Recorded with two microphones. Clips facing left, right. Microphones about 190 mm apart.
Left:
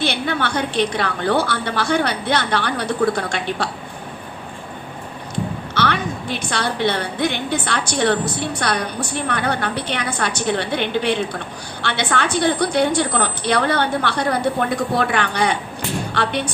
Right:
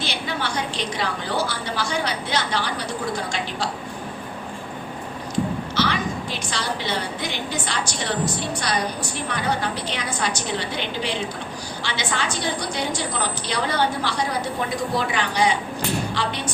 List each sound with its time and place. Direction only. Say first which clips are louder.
0.0 s a woman's voice: left 6 dB; 60° left (ahead or behind)
5.7 s a woman's voice: left 4 dB; 60° left (ahead or behind)